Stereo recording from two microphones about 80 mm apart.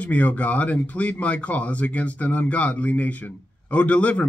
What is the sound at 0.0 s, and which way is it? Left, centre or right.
Speech, centre.